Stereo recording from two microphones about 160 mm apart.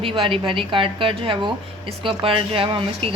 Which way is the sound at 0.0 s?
35° right (ahead or behind).